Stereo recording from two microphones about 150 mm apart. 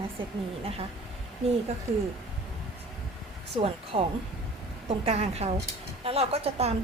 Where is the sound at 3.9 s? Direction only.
40° right (ahead or behind).